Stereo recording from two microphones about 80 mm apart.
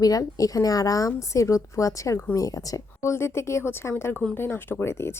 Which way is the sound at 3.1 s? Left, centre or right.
Left.